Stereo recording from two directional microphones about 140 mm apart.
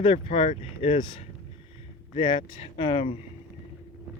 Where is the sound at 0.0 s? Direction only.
40° left (ahead or behind).